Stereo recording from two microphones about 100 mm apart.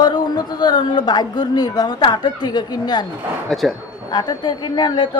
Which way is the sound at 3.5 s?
Centre (ahead or behind).